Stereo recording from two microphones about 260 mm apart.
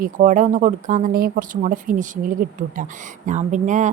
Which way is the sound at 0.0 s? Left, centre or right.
Right.